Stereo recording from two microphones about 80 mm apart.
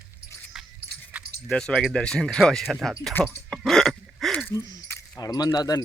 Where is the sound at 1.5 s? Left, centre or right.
Centre.